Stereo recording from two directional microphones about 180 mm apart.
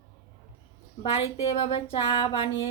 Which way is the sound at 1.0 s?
35° left (ahead or behind).